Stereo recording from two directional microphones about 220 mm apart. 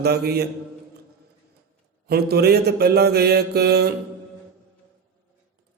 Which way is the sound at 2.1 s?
45° right (ahead or behind).